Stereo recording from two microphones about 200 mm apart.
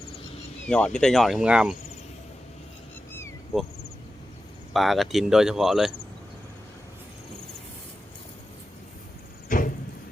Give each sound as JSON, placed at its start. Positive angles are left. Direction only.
{"t": 0.7, "sound": "speech", "side_deg": 5}
{"t": 4.7, "sound": "speech", "side_deg": 0}
{"t": 9.5, "sound": "a sound", "side_deg": 45}